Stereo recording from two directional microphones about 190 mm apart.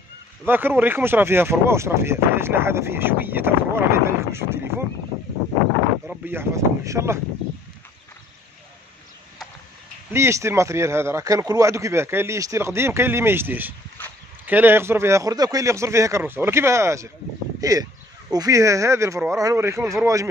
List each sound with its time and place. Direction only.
0.5 s speech: 10° right (ahead or behind)
6.0 s speech: 10° right (ahead or behind)
10.1 s speech: 15° right (ahead or behind)